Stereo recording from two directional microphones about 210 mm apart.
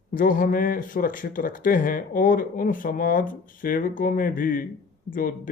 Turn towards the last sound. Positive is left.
turn(degrees=40)  # may be behind; listen again after turning